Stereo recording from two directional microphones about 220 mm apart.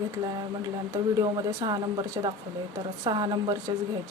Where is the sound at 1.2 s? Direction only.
20° right (ahead or behind).